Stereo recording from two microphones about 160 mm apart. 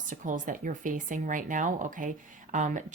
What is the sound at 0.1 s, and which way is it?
Speech, 55° right (ahead or behind).